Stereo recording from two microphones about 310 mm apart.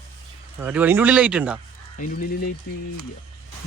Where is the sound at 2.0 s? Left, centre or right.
Left.